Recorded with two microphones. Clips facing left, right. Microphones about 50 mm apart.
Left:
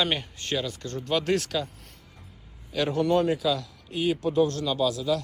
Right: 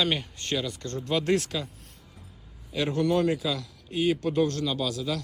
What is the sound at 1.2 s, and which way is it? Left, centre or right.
Speech, right.